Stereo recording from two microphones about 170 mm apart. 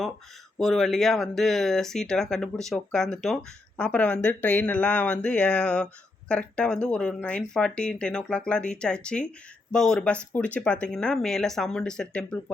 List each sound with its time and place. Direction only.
0.6 s speech: centre (ahead or behind)